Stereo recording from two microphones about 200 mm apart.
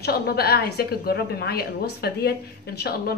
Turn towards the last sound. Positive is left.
turn(degrees=50)  # may be behind; listen again after turning